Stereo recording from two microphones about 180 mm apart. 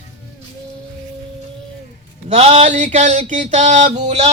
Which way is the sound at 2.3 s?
35° right (ahead or behind).